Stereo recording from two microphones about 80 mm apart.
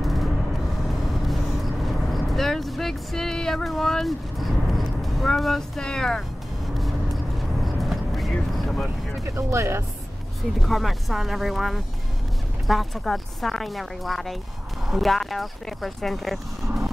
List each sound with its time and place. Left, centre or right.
0.0 s vehicle: centre
7.6 s vehicle: centre
9.2 s speech: right
10.6 s speech: centre